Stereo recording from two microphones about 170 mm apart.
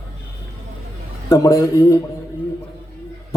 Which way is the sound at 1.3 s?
20° left (ahead or behind).